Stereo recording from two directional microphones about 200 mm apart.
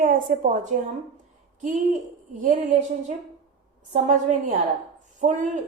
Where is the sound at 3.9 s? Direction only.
40° right (ahead or behind).